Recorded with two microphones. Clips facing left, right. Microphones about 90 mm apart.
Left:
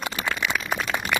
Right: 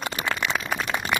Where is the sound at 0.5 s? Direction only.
30° right (ahead or behind).